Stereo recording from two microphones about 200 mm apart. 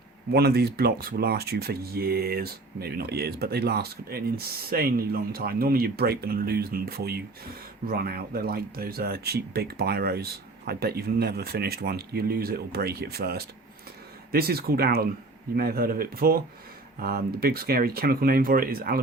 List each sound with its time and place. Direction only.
0.3 s speech: 50° right (ahead or behind)